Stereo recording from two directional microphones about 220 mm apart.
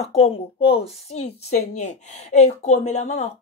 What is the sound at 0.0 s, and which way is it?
A woman's voice, 25° left (ahead or behind).